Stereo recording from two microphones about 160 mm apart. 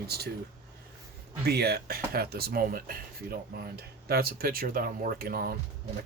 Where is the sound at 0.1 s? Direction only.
85° right.